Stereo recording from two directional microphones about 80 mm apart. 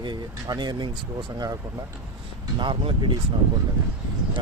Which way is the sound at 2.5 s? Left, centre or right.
Right.